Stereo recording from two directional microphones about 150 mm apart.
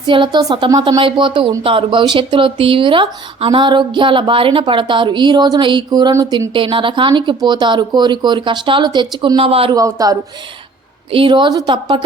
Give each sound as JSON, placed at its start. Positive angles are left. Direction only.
{"t": 0.1, "sound": "speech", "side_deg": -30}
{"t": 6.5, "sound": "speech", "side_deg": -35}
{"t": 9.7, "sound": "speech", "side_deg": -25}
{"t": 11.1, "sound": "speech", "side_deg": -35}